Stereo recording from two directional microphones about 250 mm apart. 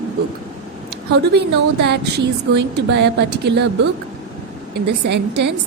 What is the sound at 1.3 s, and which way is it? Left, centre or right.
Speech, right.